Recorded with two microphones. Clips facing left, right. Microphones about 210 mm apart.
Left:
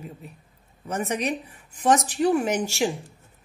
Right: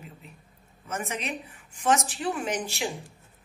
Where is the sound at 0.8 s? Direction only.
35° left (ahead or behind).